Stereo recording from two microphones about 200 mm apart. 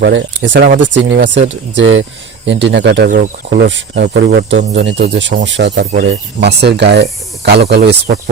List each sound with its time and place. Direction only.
0.0 s speech: 65° right (ahead or behind)